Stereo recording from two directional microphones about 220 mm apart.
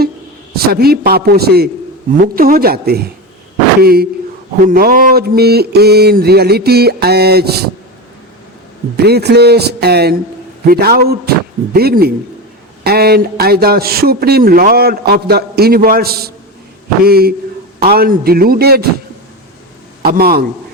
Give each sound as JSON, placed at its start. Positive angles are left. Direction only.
{"t": 0.5, "sound": "speech", "side_deg": -45}
{"t": 9.0, "sound": "speech", "side_deg": -45}
{"t": 20.0, "sound": "a man's voice", "side_deg": -45}